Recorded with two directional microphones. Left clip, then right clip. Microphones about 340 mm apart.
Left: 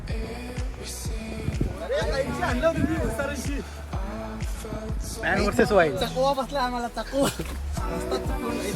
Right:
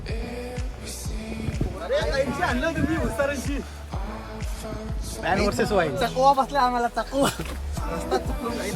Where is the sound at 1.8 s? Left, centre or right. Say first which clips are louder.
Right 3 dB; centre.